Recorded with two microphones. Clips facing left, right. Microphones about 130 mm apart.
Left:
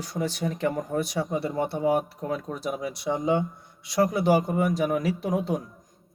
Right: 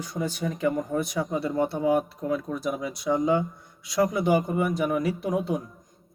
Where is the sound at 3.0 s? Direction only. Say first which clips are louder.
Right 2 dB; 25° left (ahead or behind).